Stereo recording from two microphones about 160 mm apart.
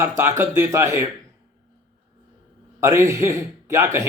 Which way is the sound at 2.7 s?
20° right (ahead or behind).